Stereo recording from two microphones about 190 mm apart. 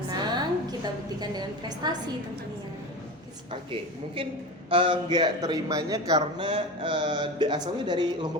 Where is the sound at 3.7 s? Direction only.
25° right (ahead or behind).